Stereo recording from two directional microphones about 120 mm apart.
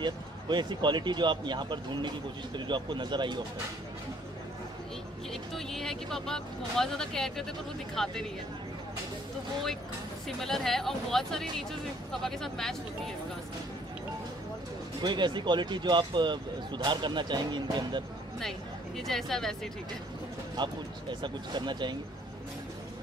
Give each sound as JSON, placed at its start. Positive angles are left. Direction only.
{"t": 0.0, "sound": "speech", "side_deg": -40}
{"t": 5.3, "sound": "speech", "side_deg": 5}
{"t": 10.2, "sound": "speech", "side_deg": 5}
{"t": 15.0, "sound": "speech", "side_deg": -40}
{"t": 18.9, "sound": "speech", "side_deg": 0}
{"t": 20.5, "sound": "speech", "side_deg": -40}